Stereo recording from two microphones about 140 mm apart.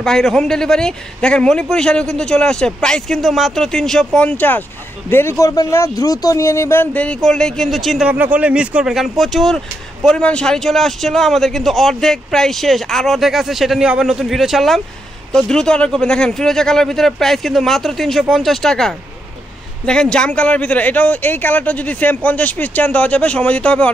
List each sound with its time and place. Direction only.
0.0 s a man's voice: 5° left (ahead or behind)
5.4 s speech: 25° left (ahead or behind); by 8.1 s centre (ahead or behind)
8.1 s a man's voice: 10° right (ahead or behind); by 23.9 s 10° left (ahead or behind)